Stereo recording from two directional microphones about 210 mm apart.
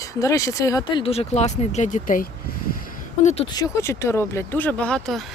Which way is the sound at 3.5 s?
15° left (ahead or behind).